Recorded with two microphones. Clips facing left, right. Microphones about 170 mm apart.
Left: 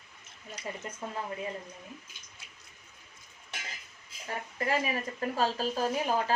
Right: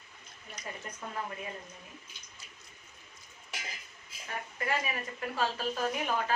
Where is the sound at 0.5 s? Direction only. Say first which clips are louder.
Left 4 dB; 30° left (ahead or behind).